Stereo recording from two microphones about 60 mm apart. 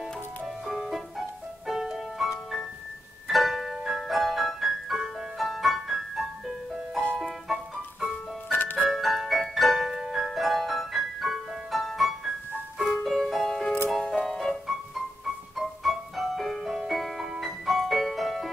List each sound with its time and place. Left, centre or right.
0.7 s music: centre
8.5 s music: left
8.9 s music: centre